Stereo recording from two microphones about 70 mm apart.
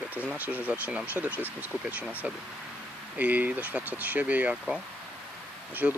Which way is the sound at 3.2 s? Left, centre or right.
Right.